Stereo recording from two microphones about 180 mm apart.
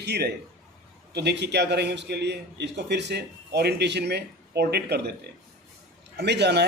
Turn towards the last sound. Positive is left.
turn(degrees=-70)  # may be behind; listen again after turning